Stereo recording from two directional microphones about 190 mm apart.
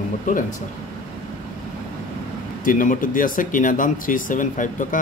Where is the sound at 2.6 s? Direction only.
45° left (ahead or behind).